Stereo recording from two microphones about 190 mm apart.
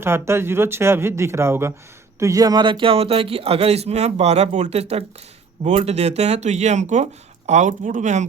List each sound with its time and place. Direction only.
0.0 s speech: 15° right (ahead or behind); by 8.3 s 40° right (ahead or behind)